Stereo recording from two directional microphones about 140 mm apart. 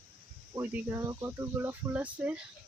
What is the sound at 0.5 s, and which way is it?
Speech, 15° right (ahead or behind).